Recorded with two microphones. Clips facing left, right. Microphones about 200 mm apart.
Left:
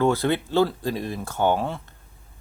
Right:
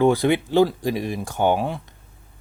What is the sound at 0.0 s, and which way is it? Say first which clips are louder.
Speech: right 4 dB; 15° right (ahead or behind).